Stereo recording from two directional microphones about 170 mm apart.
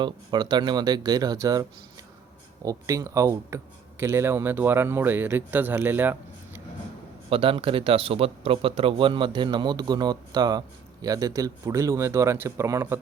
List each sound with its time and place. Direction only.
0.0 s speech: 25° right (ahead or behind)
2.6 s speech: 20° right (ahead or behind)
7.3 s speech: 30° right (ahead or behind); by 13.0 s 15° right (ahead or behind)